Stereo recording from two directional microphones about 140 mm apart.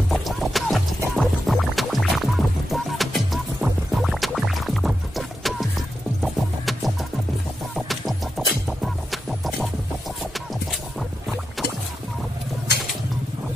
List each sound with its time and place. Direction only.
0.1 s music: centre (ahead or behind)